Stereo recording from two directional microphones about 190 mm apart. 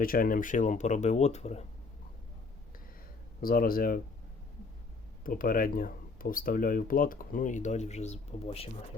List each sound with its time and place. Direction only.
0.0 s speech: 50° left (ahead or behind)
3.4 s speech: 50° left (ahead or behind)
5.2 s speech: 45° left (ahead or behind); by 8.7 s 30° left (ahead or behind)